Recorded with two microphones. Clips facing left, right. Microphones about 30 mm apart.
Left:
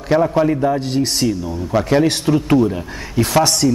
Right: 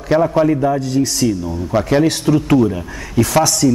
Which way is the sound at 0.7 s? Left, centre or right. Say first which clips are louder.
Right 2 dB; left.